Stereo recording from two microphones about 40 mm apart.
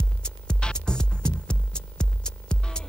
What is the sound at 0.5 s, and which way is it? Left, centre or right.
Music, left.